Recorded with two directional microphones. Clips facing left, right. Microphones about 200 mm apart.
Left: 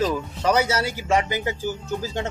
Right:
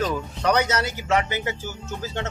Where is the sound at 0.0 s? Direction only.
5° left (ahead or behind).